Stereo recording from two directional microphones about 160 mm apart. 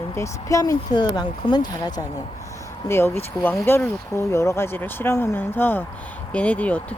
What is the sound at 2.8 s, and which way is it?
Speech, 15° left (ahead or behind).